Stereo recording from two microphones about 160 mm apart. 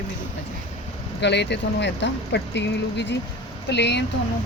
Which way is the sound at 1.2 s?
90° left.